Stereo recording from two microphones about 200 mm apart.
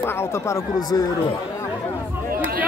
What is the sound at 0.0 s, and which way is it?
Speech, 10° left (ahead or behind).